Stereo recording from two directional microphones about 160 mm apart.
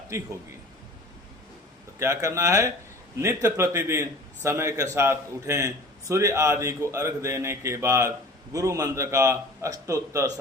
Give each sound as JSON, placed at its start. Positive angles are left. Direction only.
{"t": 0.1, "sound": "a man's voice", "side_deg": -20}
{"t": 2.0, "sound": "a man's voice", "side_deg": -20}